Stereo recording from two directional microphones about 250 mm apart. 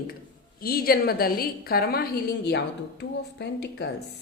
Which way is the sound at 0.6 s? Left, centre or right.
Left.